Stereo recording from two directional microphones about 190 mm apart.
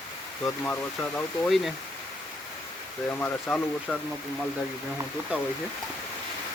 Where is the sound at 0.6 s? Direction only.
10° left (ahead or behind).